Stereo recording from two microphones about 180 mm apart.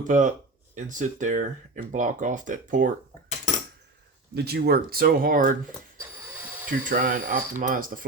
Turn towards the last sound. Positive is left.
turn(degrees=-50)  # may be behind; listen again after turning